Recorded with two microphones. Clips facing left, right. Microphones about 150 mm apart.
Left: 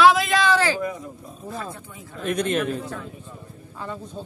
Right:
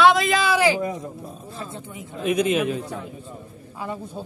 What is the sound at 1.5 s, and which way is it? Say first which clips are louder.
Speech: left 4 dB; 25° right (ahead or behind).